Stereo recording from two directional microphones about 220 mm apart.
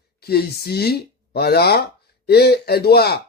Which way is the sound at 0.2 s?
45° left (ahead or behind).